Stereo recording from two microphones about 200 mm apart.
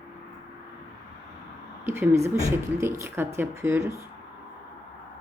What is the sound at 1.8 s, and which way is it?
Speech, 10° right (ahead or behind).